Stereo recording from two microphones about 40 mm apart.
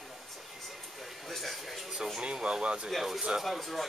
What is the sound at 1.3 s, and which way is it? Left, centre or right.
Speech, centre.